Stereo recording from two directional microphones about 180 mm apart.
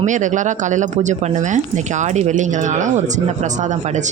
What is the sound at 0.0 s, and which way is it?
Speech, 45° right (ahead or behind).